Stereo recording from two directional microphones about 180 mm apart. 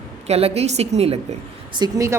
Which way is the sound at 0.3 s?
35° right (ahead or behind).